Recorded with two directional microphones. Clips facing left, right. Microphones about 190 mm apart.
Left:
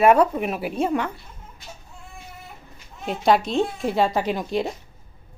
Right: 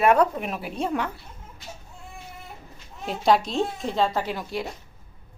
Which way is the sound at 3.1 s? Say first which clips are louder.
Left 2 dB; centre (ahead or behind).